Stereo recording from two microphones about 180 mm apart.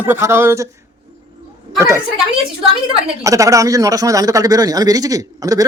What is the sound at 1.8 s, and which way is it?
Speech, 15° right (ahead or behind).